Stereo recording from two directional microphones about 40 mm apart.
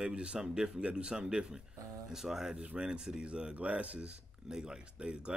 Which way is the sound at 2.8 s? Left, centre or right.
Centre.